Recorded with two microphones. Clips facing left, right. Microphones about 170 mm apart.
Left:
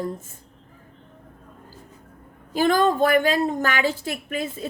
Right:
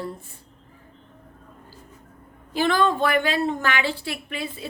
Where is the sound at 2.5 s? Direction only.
45° left (ahead or behind).